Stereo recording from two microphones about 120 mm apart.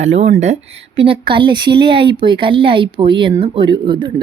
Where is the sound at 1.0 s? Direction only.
45° right (ahead or behind).